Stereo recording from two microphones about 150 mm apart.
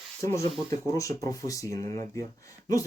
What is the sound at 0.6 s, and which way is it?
Speech, 20° left (ahead or behind).